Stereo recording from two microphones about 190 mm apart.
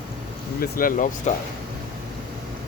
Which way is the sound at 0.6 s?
45° left (ahead or behind).